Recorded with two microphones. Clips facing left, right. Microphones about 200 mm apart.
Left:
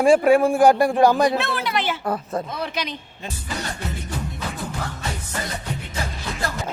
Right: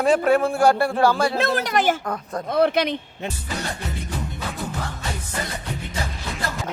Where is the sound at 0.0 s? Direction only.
10° left (ahead or behind).